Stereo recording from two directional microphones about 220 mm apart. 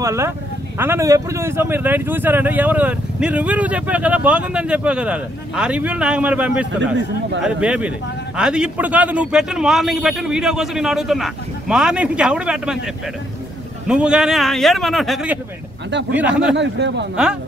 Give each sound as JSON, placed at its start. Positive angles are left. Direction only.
{"t": 0.0, "sound": "a man's voice", "side_deg": -10}
{"t": 13.8, "sound": "a man's voice", "side_deg": -5}
{"t": 16.5, "sound": "speech", "side_deg": -50}
{"t": 17.2, "sound": "a man's voice", "side_deg": -5}